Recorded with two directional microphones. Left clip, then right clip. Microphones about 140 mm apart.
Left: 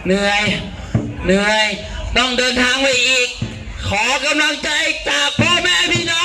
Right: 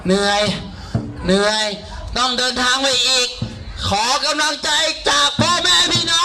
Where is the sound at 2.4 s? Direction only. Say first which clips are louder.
Left 2 dB; 40° right (ahead or behind).